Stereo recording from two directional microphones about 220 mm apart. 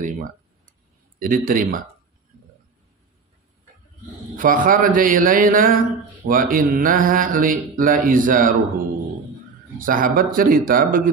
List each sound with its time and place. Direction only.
0.0 s mantra: 35° right (ahead or behind)
4.4 s mantra: 40° right (ahead or behind)
9.8 s mantra: 40° right (ahead or behind)